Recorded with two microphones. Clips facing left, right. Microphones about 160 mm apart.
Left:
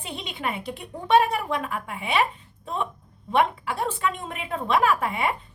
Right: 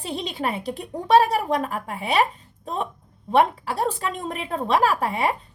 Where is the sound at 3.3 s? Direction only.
35° right (ahead or behind).